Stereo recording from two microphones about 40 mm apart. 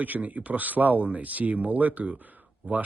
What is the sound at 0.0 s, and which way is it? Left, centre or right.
Speech, right.